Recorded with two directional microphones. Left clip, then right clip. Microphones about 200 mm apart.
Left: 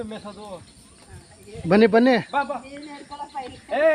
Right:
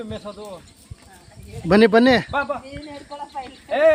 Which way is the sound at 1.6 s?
10° right (ahead or behind).